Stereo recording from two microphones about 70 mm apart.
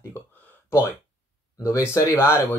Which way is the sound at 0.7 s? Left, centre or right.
Left.